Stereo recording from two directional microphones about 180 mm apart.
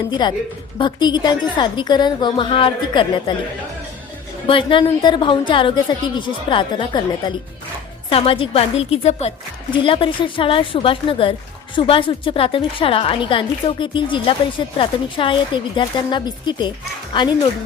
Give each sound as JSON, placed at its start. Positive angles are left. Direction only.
{"t": 0.1, "sound": "speech", "side_deg": 25}
{"t": 4.4, "sound": "a woman's voice", "side_deg": 30}